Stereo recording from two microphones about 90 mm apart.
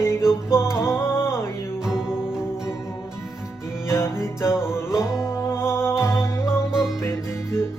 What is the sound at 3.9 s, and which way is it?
Music, 30° left (ahead or behind).